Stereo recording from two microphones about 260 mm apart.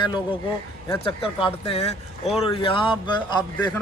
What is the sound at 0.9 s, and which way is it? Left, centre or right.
A man's voice, centre.